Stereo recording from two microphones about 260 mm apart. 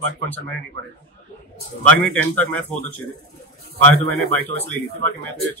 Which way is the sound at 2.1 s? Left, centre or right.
Centre.